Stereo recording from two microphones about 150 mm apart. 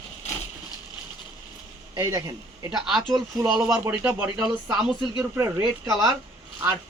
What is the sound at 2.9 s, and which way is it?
Speech, centre (ahead or behind).